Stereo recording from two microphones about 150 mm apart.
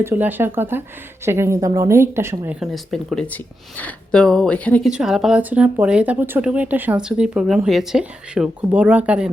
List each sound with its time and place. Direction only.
0.0 s speech: 15° right (ahead or behind)
2.6 s speech: centre (ahead or behind)
4.9 s speech: 5° right (ahead or behind)